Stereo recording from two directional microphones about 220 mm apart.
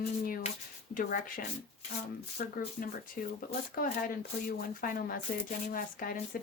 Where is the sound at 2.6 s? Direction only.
40° left (ahead or behind).